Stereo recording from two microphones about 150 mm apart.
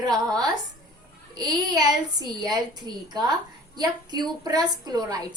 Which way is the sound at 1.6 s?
25° right (ahead or behind).